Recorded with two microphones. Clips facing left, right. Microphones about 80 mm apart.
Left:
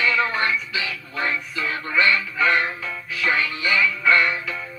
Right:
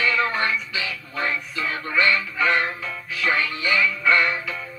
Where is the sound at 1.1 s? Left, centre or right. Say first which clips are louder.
Left 1 dB; centre.